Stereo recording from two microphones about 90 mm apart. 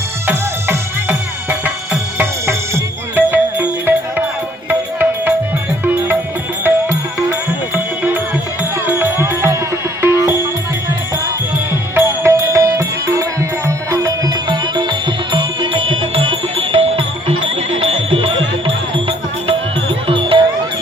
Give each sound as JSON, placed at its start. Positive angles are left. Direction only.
{"t": 0.3, "sound": "music", "side_deg": -20}
{"t": 7.2, "sound": "music", "side_deg": -20}
{"t": 11.9, "sound": "music", "side_deg": -30}
{"t": 14.4, "sound": "music", "side_deg": -55}